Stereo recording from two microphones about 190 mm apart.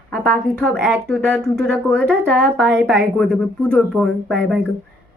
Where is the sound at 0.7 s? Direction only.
5° left (ahead or behind).